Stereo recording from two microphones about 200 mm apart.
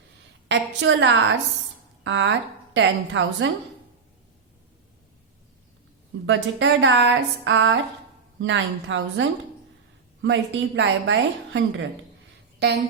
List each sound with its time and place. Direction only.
0.4 s a woman's voice: 65° right (ahead or behind)
6.2 s a woman's voice: 65° right (ahead or behind)